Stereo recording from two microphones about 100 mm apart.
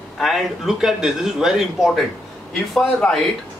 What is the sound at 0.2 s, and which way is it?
Speech, 5° right (ahead or behind).